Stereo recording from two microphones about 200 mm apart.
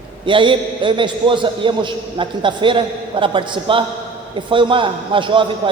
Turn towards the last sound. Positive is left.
turn(degrees=-25)  # may be behind; listen again after turning